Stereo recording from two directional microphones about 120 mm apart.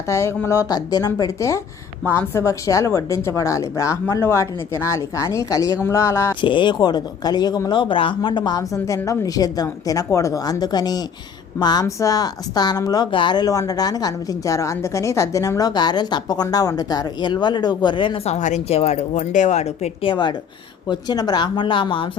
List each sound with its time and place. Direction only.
0.1 s speech: 25° left (ahead or behind)
6.4 s a woman's voice: 40° left (ahead or behind)
13.1 s a woman's voice: 40° left (ahead or behind)
18.3 s a woman's voice: 85° left; by 22.1 s 45° left (ahead or behind)